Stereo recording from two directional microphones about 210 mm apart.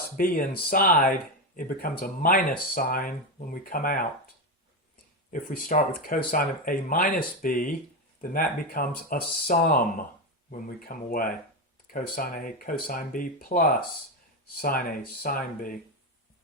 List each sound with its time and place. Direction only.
0.2 s speech: 45° left (ahead or behind)
5.3 s speech: 40° left (ahead or behind)